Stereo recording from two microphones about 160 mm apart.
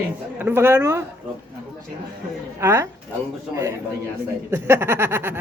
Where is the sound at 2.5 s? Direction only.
15° right (ahead or behind).